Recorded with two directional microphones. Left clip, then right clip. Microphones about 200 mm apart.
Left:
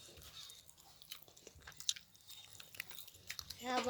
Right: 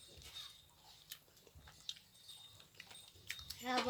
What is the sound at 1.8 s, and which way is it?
Biting, 50° left (ahead or behind).